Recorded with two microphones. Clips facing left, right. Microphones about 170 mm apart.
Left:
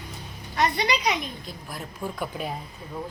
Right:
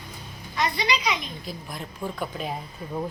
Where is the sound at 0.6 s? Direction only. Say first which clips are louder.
Left 2 dB; 60° left (ahead or behind).